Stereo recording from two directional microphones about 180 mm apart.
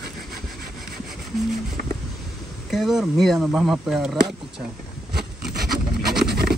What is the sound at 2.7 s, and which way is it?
Speech, centre (ahead or behind).